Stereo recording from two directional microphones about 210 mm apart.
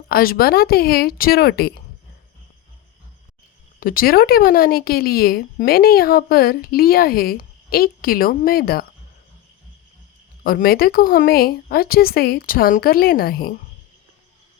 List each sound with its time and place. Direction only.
0.1 s speech: 45° left (ahead or behind)
3.8 s speech: 45° left (ahead or behind)
10.4 s speech: 45° left (ahead or behind)